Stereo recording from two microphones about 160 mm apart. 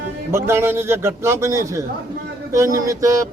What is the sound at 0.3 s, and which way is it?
A man's voice, 15° right (ahead or behind).